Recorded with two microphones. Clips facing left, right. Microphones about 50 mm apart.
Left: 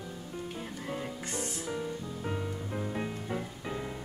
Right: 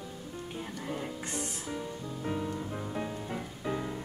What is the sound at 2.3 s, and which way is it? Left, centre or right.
Music, centre.